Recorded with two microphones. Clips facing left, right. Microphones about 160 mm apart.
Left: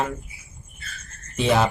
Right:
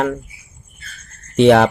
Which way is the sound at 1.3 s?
70° right (ahead or behind).